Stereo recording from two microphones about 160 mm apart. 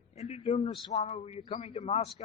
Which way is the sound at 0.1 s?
45° left (ahead or behind).